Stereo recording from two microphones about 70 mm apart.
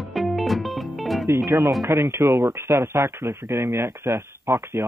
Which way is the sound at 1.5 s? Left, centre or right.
Right.